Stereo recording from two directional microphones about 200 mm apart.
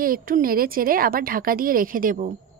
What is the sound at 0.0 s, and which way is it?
A woman's voice, 45° right (ahead or behind).